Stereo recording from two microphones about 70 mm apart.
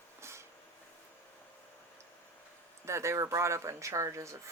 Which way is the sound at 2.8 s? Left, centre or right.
Right.